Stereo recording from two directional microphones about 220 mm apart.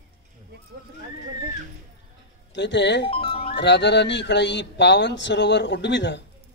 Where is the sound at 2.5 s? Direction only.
50° left (ahead or behind).